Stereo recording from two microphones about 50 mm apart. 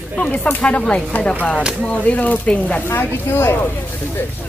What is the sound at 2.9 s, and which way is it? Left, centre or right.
Speech, left.